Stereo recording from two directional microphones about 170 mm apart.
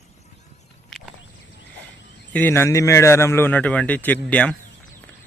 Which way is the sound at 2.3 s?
15° left (ahead or behind).